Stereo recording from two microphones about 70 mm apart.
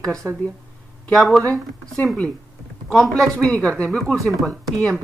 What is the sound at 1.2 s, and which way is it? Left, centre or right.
Speech, centre.